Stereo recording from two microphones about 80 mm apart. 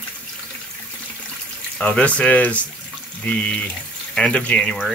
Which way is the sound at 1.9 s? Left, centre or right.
Centre.